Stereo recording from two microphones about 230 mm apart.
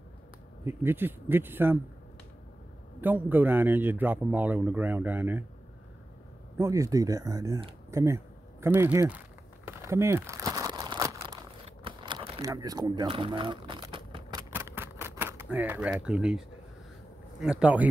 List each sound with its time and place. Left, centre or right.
0.7 s a man's voice: centre
3.0 s a man's voice: centre
6.6 s speech: centre
9.7 s crumpling: centre
11.6 s shuffling cards: right
14.5 s typewriter: centre
17.4 s speech: centre